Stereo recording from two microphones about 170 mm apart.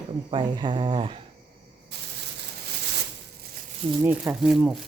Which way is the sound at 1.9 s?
80° right.